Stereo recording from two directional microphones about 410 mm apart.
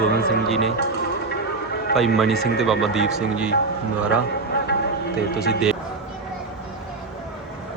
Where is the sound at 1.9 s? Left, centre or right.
Centre.